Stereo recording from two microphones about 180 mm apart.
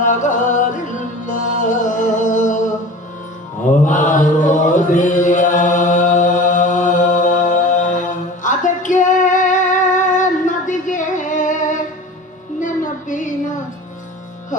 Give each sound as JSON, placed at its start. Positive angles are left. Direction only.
{"t": 0.0, "sound": "music", "side_deg": 45}
{"t": 3.8, "sound": "chant", "side_deg": 45}
{"t": 12.5, "sound": "a sound", "side_deg": 45}